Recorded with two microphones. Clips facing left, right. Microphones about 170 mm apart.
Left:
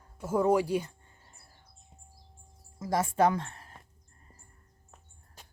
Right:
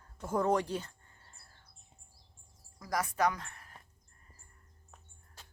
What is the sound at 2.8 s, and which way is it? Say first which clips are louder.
Speech: left 6 dB; 25° left (ahead or behind).